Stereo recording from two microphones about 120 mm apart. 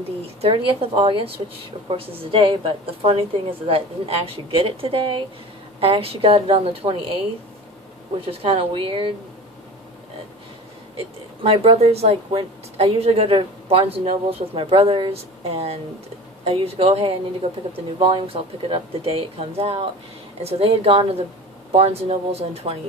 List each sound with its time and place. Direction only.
0.7 s a woman's voice: 50° right (ahead or behind)
8.3 s a woman's voice: 50° right (ahead or behind)
11.4 s a woman's voice: 55° right (ahead or behind)